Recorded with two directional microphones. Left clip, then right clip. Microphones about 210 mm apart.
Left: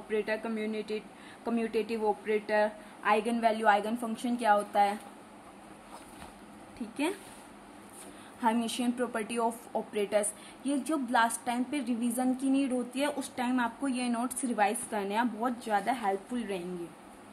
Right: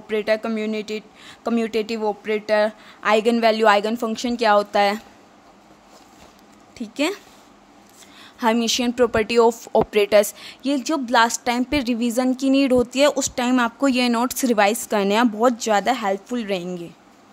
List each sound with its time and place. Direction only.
0.1 s speech: 55° right (ahead or behind)
6.8 s speech: 55° right (ahead or behind)
8.4 s a woman's voice: 50° right (ahead or behind)